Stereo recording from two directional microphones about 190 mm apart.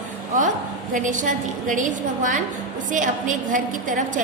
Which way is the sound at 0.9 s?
40° right (ahead or behind).